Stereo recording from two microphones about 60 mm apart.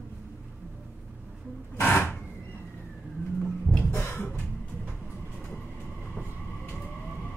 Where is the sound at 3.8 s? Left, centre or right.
Left.